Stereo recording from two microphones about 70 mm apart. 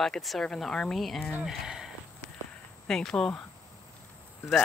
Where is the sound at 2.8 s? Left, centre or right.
Centre.